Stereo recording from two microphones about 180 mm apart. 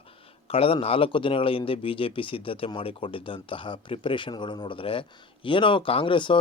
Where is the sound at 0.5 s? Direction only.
30° left (ahead or behind).